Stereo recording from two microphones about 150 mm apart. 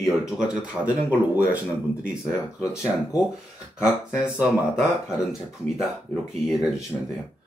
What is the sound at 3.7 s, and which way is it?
Speech, 5° right (ahead or behind).